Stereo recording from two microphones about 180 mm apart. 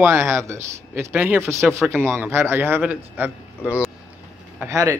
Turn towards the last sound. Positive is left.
turn(degrees=-15)  # may be behind; listen again after turning